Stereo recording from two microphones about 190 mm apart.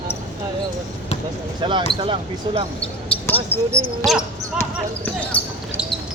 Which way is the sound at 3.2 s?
10° left (ahead or behind).